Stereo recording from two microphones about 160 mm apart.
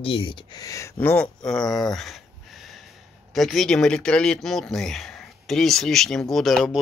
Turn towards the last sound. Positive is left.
turn(degrees=0)  # may be behind; listen again after turning